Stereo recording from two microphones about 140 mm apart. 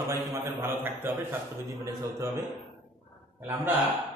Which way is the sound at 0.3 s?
20° right (ahead or behind).